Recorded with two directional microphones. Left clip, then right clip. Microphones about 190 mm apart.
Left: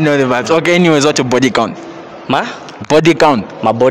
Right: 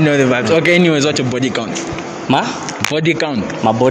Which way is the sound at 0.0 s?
45° left (ahead or behind).